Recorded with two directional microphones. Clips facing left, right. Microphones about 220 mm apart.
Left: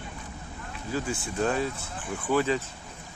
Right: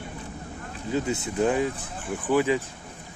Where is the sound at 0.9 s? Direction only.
20° right (ahead or behind).